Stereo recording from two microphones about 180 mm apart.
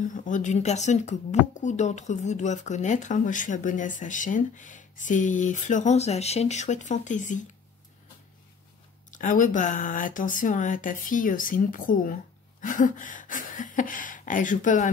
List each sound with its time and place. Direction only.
0.0 s speech: 45° left (ahead or behind)
9.1 s speech: 45° left (ahead or behind)